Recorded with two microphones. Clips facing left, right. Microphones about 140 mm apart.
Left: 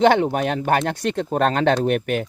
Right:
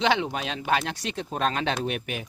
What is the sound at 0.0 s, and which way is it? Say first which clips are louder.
Speech: left 9 dB; 50° left (ahead or behind).